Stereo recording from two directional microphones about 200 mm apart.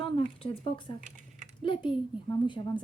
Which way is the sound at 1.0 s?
40° right (ahead or behind).